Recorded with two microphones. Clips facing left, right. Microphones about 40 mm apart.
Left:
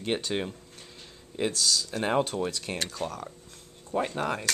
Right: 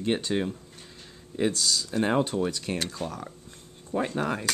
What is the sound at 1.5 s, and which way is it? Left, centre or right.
Speech, centre.